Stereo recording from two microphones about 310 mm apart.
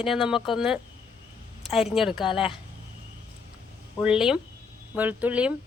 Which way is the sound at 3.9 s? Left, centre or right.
Centre.